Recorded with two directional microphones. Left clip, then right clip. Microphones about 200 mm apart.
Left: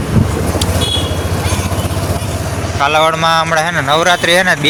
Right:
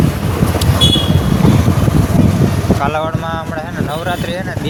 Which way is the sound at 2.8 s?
15° left (ahead or behind).